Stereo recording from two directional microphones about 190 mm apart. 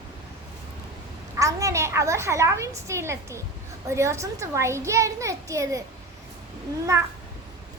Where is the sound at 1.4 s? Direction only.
15° right (ahead or behind).